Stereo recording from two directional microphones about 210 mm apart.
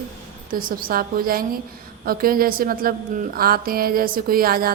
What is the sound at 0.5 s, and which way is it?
A woman's voice, 45° right (ahead or behind).